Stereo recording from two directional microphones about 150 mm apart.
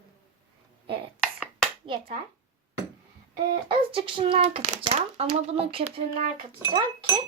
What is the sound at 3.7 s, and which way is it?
A child's voice, 35° right (ahead or behind).